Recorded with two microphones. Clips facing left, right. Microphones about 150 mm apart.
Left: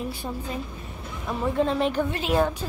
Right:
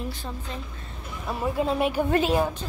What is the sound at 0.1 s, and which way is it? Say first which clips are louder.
Speech: left 4 dB; 10° left (ahead or behind).